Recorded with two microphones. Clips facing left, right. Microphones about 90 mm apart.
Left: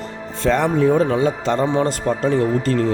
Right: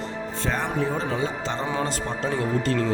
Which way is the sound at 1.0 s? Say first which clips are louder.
Left 9 dB; 65° left (ahead or behind).